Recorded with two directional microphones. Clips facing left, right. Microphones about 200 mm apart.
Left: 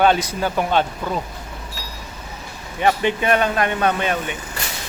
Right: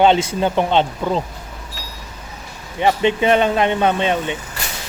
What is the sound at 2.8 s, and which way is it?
Speech, 20° right (ahead or behind).